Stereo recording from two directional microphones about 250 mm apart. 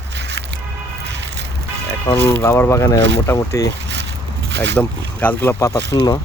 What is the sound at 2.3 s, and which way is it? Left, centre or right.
Speech, centre.